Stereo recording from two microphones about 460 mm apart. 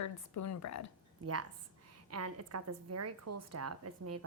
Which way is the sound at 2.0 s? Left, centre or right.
Right.